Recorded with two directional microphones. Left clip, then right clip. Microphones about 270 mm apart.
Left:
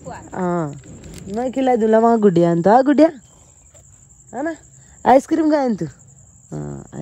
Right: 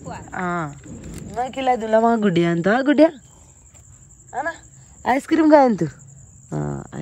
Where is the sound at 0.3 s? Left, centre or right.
Left.